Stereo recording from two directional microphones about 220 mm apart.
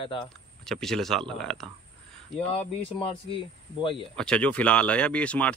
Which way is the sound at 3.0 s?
25° left (ahead or behind).